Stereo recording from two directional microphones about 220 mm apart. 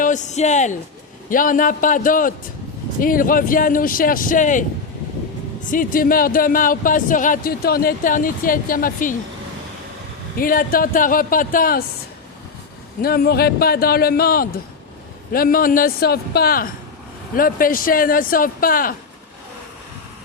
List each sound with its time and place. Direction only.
0.0 s speech: 35° left (ahead or behind)
5.7 s speech: 40° left (ahead or behind)
10.3 s speech: 40° left (ahead or behind)
13.0 s a man's voice: 45° left (ahead or behind)